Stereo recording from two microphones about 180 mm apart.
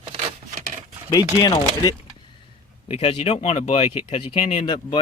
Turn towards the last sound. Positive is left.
turn(degrees=25)  # may be behind; listen again after turning